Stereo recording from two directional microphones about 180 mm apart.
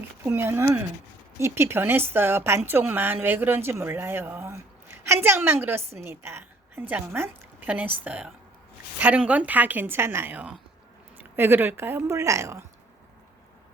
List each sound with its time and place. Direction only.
0.3 s a woman's voice: 10° right (ahead or behind)